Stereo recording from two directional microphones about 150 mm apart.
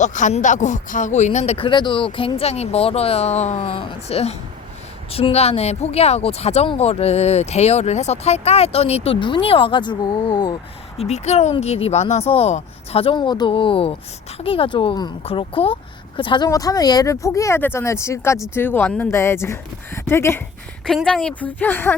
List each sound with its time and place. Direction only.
0.0 s speech: 55° left (ahead or behind); by 10.5 s 35° left (ahead or behind)
10.9 s speech: 45° left (ahead or behind); by 20.4 s 15° left (ahead or behind)
20.8 s speech: centre (ahead or behind)